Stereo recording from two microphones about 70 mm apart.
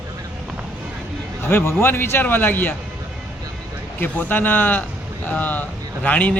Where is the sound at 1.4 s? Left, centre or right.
Left.